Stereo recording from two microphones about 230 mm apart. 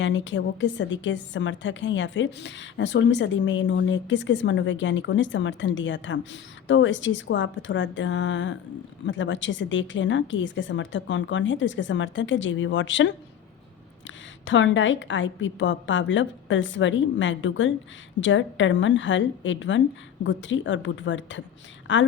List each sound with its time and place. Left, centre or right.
0.0 s a woman's voice: left
14.4 s a woman's voice: left